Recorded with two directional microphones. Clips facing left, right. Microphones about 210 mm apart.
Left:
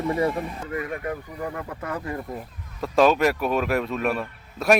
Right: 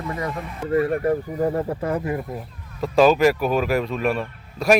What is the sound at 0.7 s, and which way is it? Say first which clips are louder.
Speech: right 11 dB; 35° right (ahead or behind).